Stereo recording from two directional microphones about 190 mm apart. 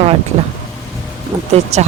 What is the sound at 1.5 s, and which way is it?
Speech, 35° right (ahead or behind).